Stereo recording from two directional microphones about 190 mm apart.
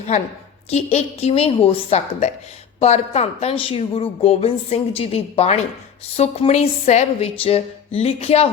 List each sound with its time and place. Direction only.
0.1 s speech: 35° left (ahead or behind)